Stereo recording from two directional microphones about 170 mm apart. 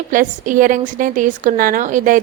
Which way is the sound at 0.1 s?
50° right (ahead or behind).